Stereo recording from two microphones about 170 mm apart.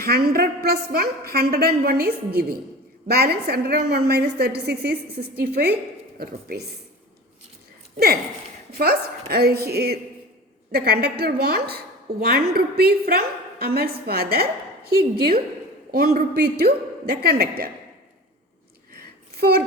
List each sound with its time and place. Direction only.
0.0 s a woman's voice: 65° right (ahead or behind)
7.9 s a woman's voice: 65° right (ahead or behind)
19.4 s a child's voice: 65° right (ahead or behind)